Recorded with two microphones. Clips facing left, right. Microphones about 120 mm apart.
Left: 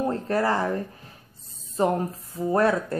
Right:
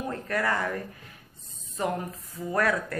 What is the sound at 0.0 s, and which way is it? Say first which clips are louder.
Speech: left 5 dB; 30° left (ahead or behind).